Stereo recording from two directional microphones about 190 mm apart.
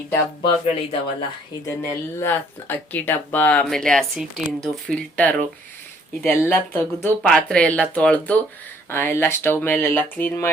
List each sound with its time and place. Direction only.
0.4 s speech: 30° left (ahead or behind)
1.6 s speech: 15° left (ahead or behind)